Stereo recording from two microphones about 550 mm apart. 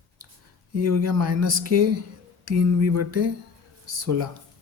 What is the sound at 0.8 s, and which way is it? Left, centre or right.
Speech, right.